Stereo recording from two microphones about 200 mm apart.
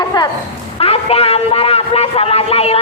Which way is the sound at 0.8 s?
30° left (ahead or behind).